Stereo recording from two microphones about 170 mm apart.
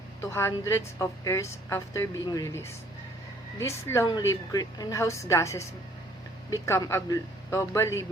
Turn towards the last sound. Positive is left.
turn(degrees=15)  # may be behind; listen again after turning